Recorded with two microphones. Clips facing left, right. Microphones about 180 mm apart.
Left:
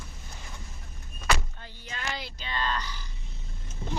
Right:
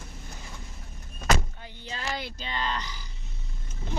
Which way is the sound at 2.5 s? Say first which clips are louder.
Left 1 dB; 20° right (ahead or behind).